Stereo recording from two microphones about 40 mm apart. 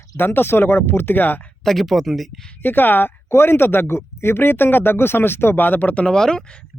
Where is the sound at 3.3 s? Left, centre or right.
Left.